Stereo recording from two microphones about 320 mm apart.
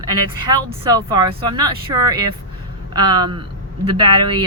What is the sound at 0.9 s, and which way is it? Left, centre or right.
Speech, centre.